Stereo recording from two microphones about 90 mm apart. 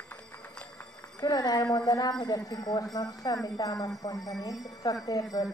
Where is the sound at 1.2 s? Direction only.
50° left (ahead or behind).